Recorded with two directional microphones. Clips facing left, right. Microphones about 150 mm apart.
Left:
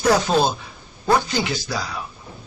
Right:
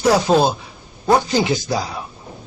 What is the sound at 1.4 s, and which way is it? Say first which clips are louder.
Speech: right 6 dB; 20° right (ahead or behind).